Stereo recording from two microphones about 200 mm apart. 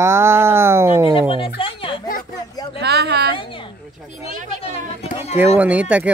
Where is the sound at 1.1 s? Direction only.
25° left (ahead or behind).